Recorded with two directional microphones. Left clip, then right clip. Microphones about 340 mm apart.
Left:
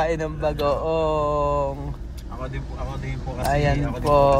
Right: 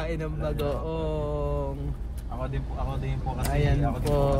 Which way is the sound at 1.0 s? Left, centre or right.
Right.